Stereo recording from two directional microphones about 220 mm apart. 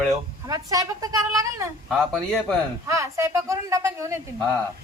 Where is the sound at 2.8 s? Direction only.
15° right (ahead or behind).